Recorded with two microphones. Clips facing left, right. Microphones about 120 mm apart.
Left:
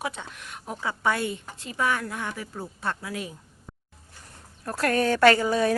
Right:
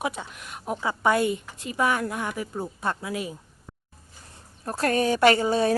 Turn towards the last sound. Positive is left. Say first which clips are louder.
# even
turn(degrees=-25)  # may be behind; listen again after turning